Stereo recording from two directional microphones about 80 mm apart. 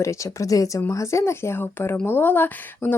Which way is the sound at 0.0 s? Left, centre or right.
Left.